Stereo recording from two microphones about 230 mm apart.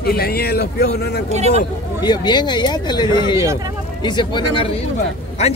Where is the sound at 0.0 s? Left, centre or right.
Left.